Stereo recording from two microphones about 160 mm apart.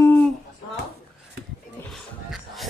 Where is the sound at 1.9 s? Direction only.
Centre (ahead or behind).